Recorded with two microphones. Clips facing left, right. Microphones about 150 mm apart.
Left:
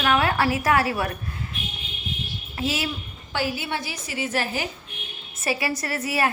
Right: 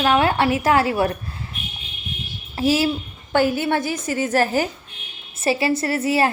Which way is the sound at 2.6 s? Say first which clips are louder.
Right 9 dB; 30° right (ahead or behind).